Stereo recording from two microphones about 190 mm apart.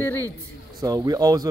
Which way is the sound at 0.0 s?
10° left (ahead or behind).